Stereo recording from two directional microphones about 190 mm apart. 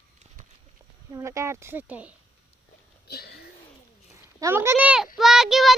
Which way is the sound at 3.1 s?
55° left (ahead or behind).